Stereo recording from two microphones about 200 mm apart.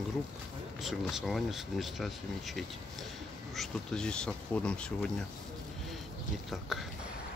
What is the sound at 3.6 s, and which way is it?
Speech, 5° left (ahead or behind).